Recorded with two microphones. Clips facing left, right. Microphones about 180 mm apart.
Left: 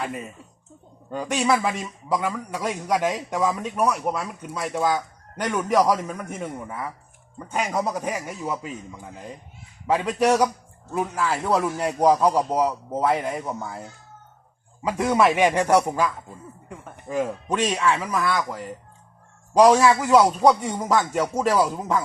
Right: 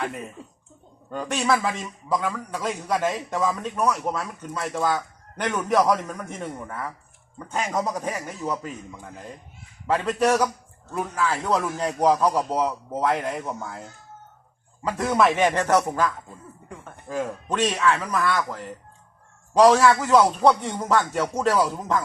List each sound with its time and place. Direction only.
0.0 s a man's voice: 10° left (ahead or behind)
9.8 s a man's voice: 10° left (ahead or behind)
14.8 s a man's voice: 10° left (ahead or behind)